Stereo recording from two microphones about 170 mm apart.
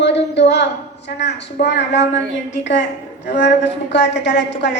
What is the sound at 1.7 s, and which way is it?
A woman's voice, 90° left.